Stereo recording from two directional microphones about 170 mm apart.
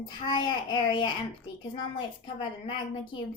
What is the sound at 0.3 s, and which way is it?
Speech, 25° left (ahead or behind).